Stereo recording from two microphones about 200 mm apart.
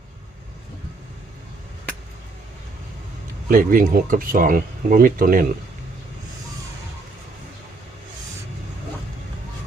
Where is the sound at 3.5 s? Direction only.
45° right (ahead or behind).